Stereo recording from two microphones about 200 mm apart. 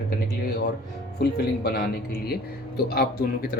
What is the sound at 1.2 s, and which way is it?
Speech, 55° left (ahead or behind).